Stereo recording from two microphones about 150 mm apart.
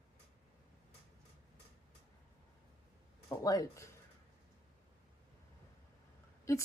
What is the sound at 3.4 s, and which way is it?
Speech, 25° left (ahead or behind).